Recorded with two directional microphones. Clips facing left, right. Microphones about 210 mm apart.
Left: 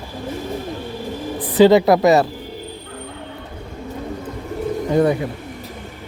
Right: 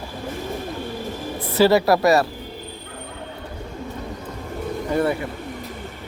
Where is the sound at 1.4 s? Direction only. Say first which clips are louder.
Left 5 dB; 15° left (ahead or behind).